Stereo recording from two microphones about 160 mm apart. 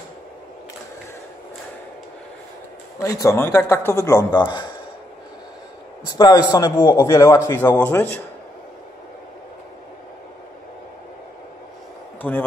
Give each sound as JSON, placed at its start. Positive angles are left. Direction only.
{"t": 3.0, "sound": "a man's voice", "side_deg": 20}
{"t": 6.0, "sound": "a man's voice", "side_deg": 25}
{"t": 12.2, "sound": "speech", "side_deg": 10}